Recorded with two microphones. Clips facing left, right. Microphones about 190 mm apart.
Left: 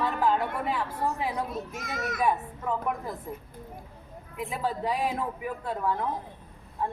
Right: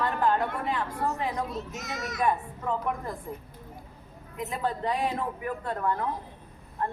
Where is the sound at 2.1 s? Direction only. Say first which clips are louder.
Even; 5° left (ahead or behind).